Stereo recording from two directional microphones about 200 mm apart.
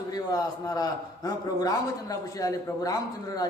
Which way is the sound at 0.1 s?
20° left (ahead or behind).